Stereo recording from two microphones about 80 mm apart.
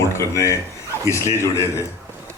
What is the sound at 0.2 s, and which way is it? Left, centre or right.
Speech, left.